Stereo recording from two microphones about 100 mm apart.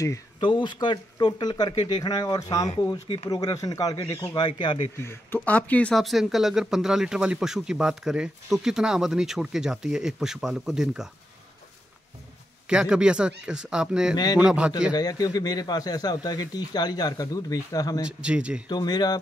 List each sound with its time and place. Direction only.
0.4 s speech: 50° left (ahead or behind); by 4.5 s 35° left (ahead or behind)
4.5 s speech: 50° left (ahead or behind)
5.0 s speech: 20° left (ahead or behind)
5.9 s speech: centre (ahead or behind)
12.6 s speech: 10° right (ahead or behind)
14.1 s speech: 40° left (ahead or behind)
14.4 s speech: 10° right (ahead or behind)
15.0 s speech: 40° left (ahead or behind)
18.0 s speech: 10° right (ahead or behind)
18.7 s speech: 45° left (ahead or behind)